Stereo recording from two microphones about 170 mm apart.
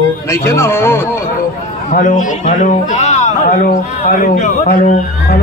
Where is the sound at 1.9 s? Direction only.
50° left (ahead or behind).